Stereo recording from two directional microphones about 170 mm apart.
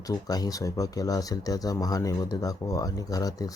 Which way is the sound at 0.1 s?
20° left (ahead or behind).